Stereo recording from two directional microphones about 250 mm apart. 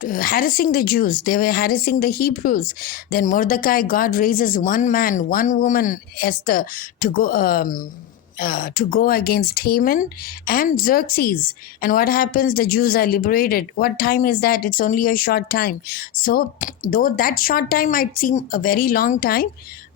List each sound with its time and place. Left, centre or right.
0.0 s speech: left